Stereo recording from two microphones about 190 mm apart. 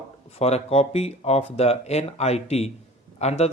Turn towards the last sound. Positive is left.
turn(degrees=35)  # may be behind; listen again after turning